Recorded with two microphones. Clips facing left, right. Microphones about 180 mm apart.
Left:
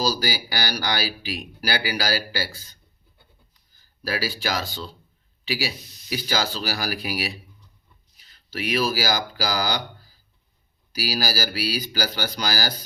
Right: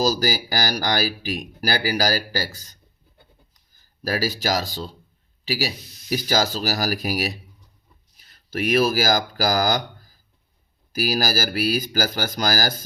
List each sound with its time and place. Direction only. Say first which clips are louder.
0.0 s speech: right 4 dB; 45° right (ahead or behind)
4.0 s speech: right 3 dB; 45° right (ahead or behind)